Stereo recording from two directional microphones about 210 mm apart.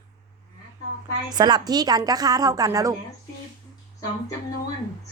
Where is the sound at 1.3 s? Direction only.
20° right (ahead or behind).